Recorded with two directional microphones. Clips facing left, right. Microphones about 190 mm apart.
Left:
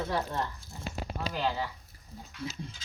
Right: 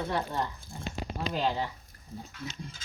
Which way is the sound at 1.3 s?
25° right (ahead or behind).